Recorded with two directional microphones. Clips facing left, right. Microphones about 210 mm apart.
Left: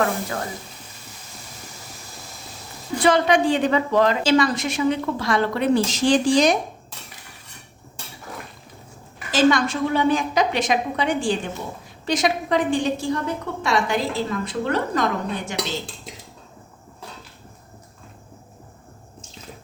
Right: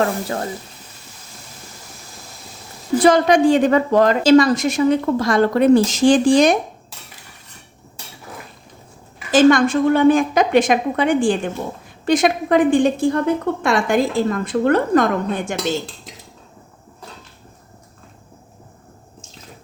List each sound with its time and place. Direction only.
3.0 s a woman's voice: 40° right (ahead or behind)
9.3 s a woman's voice: 50° right (ahead or behind)